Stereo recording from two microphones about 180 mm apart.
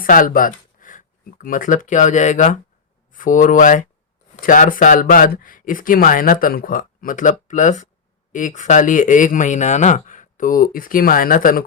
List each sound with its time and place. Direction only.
0.0 s speech: 50° left (ahead or behind)